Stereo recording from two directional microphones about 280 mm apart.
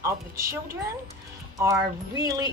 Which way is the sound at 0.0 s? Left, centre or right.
Centre.